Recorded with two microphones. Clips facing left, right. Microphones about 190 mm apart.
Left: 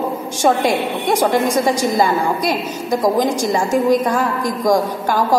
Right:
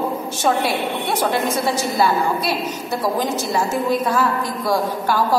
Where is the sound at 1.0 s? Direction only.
10° left (ahead or behind).